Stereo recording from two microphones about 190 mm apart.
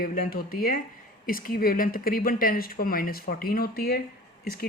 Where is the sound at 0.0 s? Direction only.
50° left (ahead or behind).